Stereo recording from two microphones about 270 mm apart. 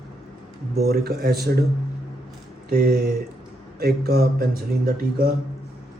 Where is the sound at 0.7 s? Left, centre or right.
Right.